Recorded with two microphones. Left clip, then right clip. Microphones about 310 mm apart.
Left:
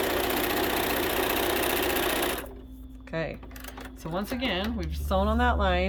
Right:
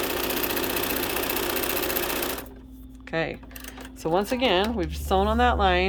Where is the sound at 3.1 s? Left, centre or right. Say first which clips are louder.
Right 5 dB; centre.